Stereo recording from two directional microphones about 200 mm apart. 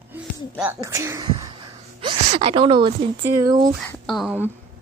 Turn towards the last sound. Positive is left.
turn(degrees=0)  # may be behind; listen again after turning